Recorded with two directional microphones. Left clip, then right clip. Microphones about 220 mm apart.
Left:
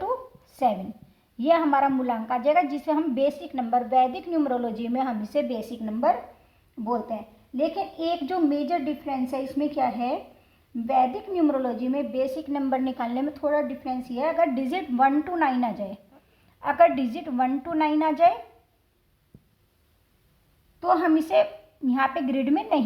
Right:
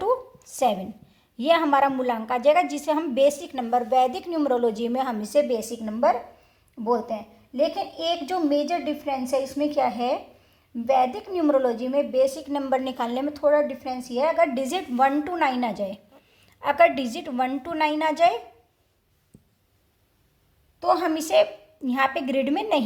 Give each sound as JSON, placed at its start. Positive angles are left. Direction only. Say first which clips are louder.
{"t": 0.5, "sound": "a woman's voice", "louder": "right 1 dB", "side_deg": -45}
{"t": 20.7, "sound": "a woman's voice", "louder": "left 1 dB", "side_deg": -40}